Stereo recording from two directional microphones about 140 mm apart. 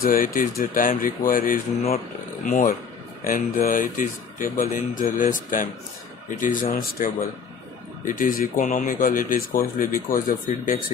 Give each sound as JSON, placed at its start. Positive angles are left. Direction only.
{"t": 0.0, "sound": "speech", "side_deg": 90}
{"t": 8.2, "sound": "speech", "side_deg": 75}